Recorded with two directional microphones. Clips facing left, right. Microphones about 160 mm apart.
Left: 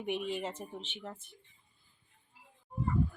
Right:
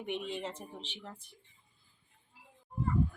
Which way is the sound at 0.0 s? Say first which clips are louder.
Left 2 dB; 10° left (ahead or behind).